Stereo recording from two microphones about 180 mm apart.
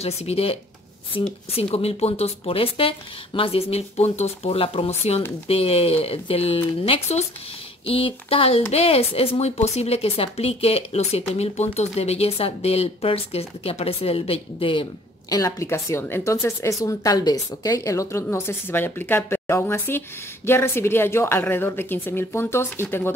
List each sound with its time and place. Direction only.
0.0 s a woman's voice: 35° left (ahead or behind); by 23.1 s 15° left (ahead or behind)